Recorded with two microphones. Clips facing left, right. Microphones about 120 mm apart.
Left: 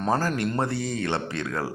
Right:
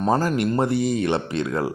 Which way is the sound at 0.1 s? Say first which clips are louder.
Right 4 dB; 20° right (ahead or behind).